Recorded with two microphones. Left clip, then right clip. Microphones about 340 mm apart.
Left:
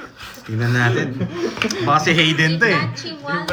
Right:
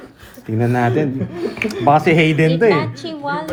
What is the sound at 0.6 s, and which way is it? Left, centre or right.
Speech, centre.